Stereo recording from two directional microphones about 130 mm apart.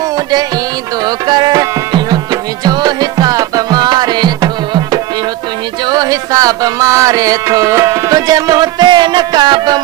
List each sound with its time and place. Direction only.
1.0 s music: 30° right (ahead or behind)